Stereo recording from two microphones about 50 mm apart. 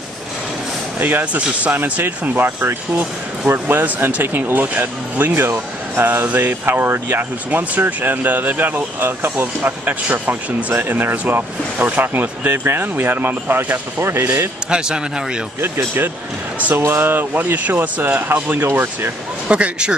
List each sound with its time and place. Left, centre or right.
0.9 s speech: right
1.3 s speech: right
2.0 s speech: right
3.8 s speech: right
4.2 s speech: right
10.7 s speech: right
14.7 s a man's voice: centre
15.6 s speech: right
17.6 s speech: right
19.4 s speech: right